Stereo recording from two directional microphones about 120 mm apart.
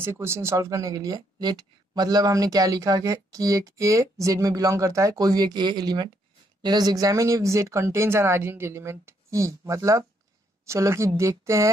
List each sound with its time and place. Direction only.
0.0 s a woman's voice: 20° right (ahead or behind)